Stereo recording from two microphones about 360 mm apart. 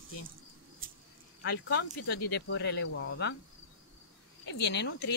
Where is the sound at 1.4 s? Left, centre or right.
Left.